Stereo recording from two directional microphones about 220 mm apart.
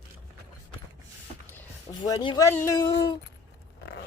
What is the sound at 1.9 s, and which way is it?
Speech, 20° left (ahead or behind).